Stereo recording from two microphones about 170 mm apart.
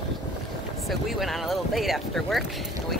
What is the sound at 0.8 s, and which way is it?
Speech, centre (ahead or behind).